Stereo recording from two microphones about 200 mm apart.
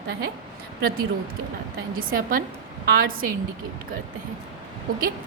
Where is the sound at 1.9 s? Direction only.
45° right (ahead or behind).